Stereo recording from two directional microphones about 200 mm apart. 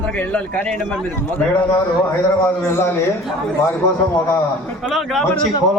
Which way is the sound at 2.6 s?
10° left (ahead or behind).